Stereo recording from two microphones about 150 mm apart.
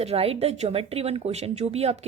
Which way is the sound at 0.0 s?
40° right (ahead or behind).